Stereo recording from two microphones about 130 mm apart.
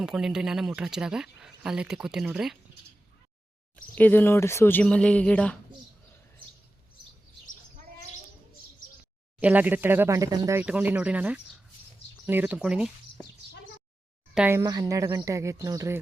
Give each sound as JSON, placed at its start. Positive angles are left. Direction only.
{"t": 0.0, "sound": "speech", "side_deg": -5}
{"t": 3.9, "sound": "speech", "side_deg": 15}
{"t": 9.4, "sound": "speech", "side_deg": -10}
{"t": 10.6, "sound": "speech", "side_deg": -15}
{"t": 14.5, "sound": "speech", "side_deg": -25}